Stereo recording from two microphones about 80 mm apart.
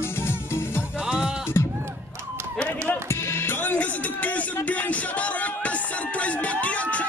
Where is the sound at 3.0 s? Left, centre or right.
Left.